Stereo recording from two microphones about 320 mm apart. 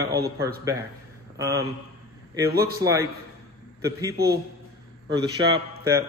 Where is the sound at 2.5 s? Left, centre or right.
Right.